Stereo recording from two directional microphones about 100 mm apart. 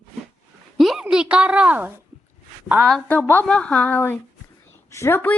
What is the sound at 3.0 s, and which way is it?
Speech, 15° left (ahead or behind).